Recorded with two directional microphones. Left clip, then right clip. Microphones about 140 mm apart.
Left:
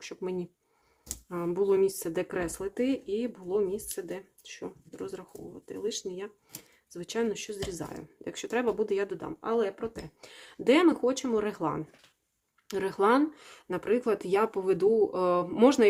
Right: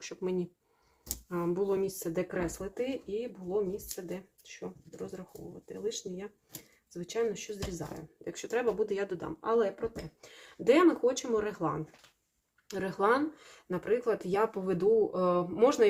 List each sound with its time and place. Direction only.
0.2 s speech: 25° left (ahead or behind)
1.6 s speech: 50° left (ahead or behind)
9.1 s speech: 30° left (ahead or behind)
10.2 s speech: 60° left (ahead or behind)